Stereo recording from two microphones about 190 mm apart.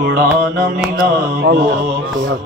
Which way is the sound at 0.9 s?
60° right (ahead or behind).